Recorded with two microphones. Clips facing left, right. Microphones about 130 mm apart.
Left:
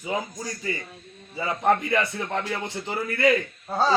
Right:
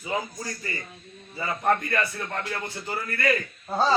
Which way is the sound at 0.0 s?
15° left (ahead or behind).